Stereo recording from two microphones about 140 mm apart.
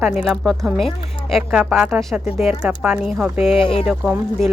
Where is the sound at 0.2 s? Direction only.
Centre (ahead or behind).